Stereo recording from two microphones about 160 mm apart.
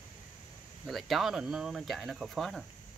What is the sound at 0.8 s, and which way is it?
Speech, centre (ahead or behind).